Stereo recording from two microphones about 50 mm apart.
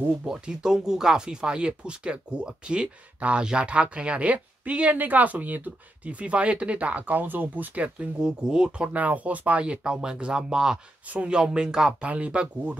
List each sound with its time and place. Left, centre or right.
0.2 s speech: centre
8.9 s speech: right; by 10.8 s centre
11.1 s speech: right